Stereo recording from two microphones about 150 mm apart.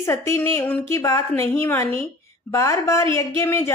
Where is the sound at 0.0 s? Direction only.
20° left (ahead or behind).